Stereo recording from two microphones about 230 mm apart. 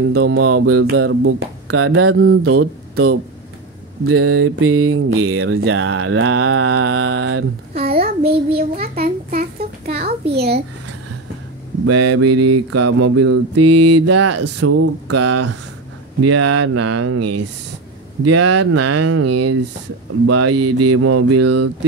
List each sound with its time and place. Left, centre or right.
0.1 s speech: right
8.5 s a sound: right
11.8 s mantra: right